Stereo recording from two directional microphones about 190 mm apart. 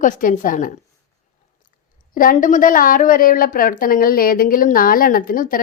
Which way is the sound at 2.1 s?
45° left (ahead or behind).